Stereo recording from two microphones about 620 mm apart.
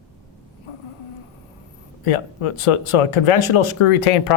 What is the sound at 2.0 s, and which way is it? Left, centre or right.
Speech, left.